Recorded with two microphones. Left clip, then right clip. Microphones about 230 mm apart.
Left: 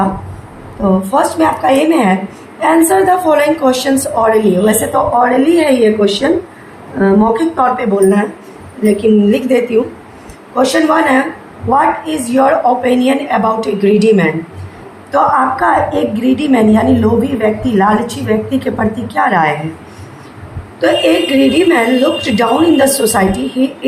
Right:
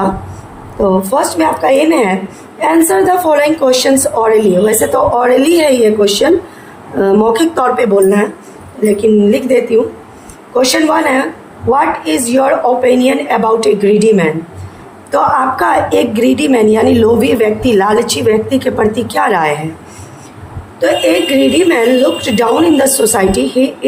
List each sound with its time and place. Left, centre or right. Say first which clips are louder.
0.8 s a woman's voice: right 1 dB; right
20.8 s a woman's voice: even; right